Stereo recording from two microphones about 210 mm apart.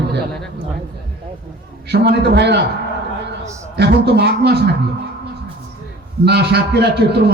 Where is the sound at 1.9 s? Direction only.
50° right (ahead or behind).